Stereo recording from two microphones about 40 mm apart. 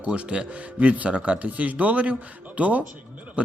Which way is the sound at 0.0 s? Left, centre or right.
Right.